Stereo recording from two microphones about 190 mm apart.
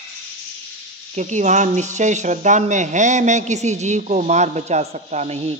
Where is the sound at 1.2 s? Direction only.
40° right (ahead or behind).